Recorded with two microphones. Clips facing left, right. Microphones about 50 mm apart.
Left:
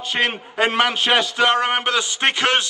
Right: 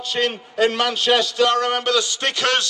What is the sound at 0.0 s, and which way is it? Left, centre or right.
A man's voice, left.